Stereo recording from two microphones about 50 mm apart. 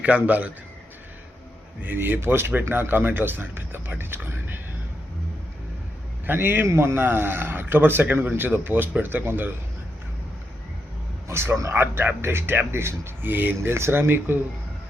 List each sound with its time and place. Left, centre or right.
0.0 s a man's voice: right
1.8 s speech: right
6.2 s speech: right
6.7 s speech: right
11.3 s a man's voice: right
11.7 s speech: right
13.3 s speech: right
13.6 s speech: right
14.3 s speech: right